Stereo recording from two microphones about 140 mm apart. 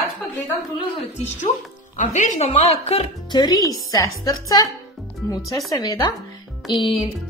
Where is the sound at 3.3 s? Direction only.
25° left (ahead or behind).